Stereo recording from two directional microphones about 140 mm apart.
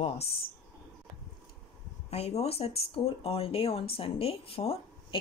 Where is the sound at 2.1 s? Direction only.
50° left (ahead or behind).